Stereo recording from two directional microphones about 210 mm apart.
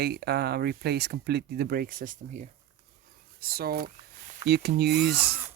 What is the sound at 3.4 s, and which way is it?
Speech, 45° right (ahead or behind).